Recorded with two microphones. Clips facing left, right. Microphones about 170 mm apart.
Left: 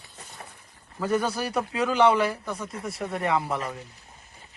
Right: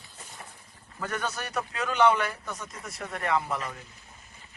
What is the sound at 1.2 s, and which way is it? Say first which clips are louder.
Speech: left 5 dB; 10° left (ahead or behind).